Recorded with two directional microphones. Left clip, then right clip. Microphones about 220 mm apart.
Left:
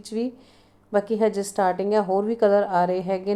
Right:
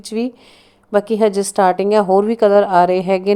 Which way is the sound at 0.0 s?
30° right (ahead or behind).